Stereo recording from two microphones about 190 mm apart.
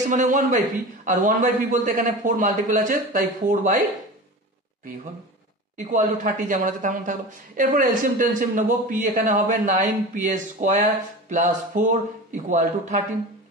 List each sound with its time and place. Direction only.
0.1 s speech: 40° right (ahead or behind)
5.8 s speech: 40° right (ahead or behind)